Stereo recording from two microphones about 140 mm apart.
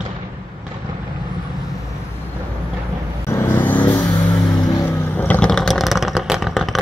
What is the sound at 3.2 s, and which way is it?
Vehicle, 15° left (ahead or behind).